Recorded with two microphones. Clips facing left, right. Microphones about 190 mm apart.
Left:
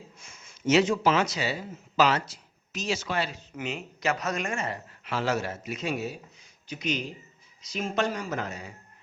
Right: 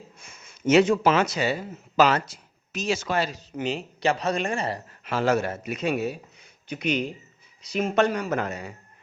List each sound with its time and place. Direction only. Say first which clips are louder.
0.2 s speech: right 3 dB; 60° right (ahead or behind); by 5.1 s 35° right (ahead or behind)
5.1 s a man's voice: right 5 dB; 50° right (ahead or behind)